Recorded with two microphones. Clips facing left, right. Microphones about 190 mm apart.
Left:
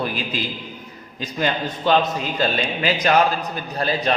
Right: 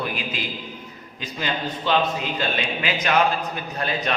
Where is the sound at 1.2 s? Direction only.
45° left (ahead or behind).